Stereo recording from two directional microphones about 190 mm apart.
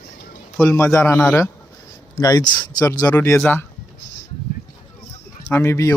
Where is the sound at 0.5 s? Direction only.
15° left (ahead or behind).